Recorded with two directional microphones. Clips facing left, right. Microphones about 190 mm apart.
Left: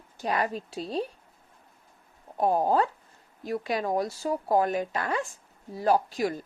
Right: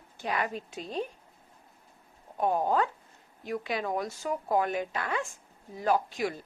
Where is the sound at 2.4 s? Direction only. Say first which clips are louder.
Left 3 dB; 35° left (ahead or behind).